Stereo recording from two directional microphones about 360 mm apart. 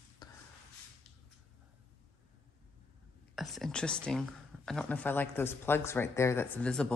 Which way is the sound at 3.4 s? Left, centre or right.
Centre.